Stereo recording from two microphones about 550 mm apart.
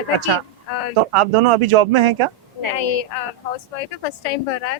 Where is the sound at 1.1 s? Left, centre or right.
Right.